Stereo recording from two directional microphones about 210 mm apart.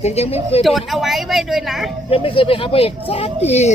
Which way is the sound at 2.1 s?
25° left (ahead or behind).